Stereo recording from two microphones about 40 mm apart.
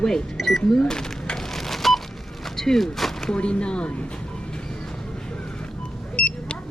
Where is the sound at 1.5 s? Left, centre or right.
Centre.